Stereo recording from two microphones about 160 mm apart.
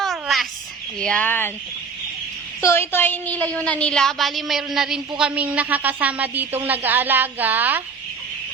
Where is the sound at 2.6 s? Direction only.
15° left (ahead or behind).